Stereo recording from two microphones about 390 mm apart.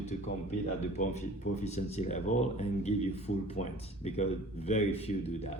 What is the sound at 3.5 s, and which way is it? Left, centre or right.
A man's voice, centre.